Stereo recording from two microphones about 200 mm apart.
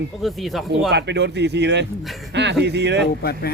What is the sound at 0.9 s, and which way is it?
Speech, 60° right (ahead or behind).